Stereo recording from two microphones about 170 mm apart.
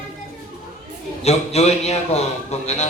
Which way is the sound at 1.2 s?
40° left (ahead or behind).